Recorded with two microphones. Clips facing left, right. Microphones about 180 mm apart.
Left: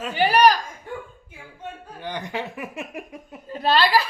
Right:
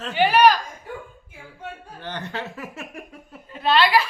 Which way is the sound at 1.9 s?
15° left (ahead or behind).